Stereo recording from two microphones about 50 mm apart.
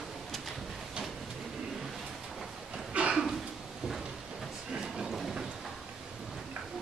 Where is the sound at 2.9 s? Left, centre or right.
Right.